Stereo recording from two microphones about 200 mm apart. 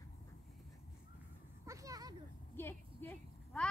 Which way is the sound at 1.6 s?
15° right (ahead or behind).